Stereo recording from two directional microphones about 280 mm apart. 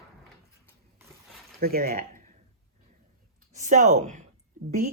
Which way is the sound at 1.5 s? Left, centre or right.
Right.